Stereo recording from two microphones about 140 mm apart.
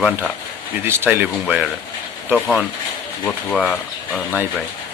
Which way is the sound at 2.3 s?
Centre (ahead or behind).